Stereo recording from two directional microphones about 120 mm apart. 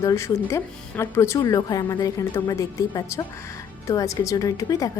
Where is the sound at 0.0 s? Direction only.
25° left (ahead or behind).